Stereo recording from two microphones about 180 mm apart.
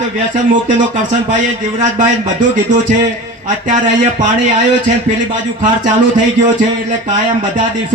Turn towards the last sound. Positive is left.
turn(degrees=-45)  # may be behind; listen again after turning